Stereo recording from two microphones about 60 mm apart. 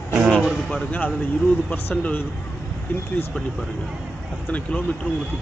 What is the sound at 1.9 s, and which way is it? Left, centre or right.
Speech, left.